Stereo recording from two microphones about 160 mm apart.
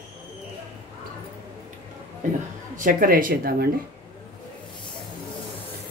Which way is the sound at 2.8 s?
60° right (ahead or behind).